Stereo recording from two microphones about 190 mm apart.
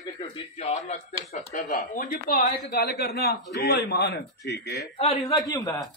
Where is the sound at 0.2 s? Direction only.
35° left (ahead or behind).